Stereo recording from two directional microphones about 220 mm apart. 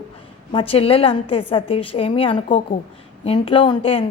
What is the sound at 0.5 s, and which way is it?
A woman's voice, 25° left (ahead or behind).